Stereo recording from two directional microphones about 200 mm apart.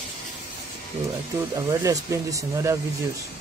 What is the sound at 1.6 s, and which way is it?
Speech, 15° right (ahead or behind).